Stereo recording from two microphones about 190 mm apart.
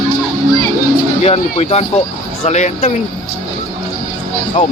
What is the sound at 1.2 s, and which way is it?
Speech, 35° left (ahead or behind).